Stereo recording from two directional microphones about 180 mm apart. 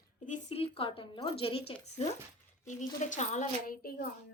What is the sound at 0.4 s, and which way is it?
A woman's voice, 35° left (ahead or behind).